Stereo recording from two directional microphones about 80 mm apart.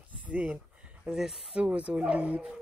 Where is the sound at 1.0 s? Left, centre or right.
Centre.